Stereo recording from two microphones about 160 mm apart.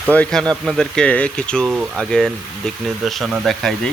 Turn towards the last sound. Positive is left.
turn(degrees=0)  # may be behind; listen again after turning